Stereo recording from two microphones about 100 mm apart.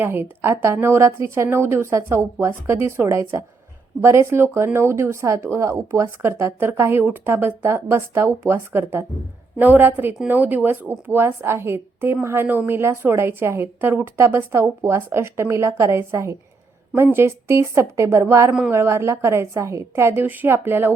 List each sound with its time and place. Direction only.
0.0 s a woman's voice: 20° right (ahead or behind)